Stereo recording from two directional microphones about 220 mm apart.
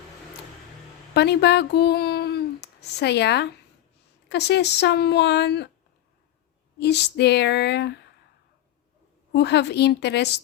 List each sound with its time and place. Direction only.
1.1 s a woman's voice: 50° left (ahead or behind)
6.7 s a woman's voice: 50° left (ahead or behind)
9.3 s a woman's voice: 50° left (ahead or behind)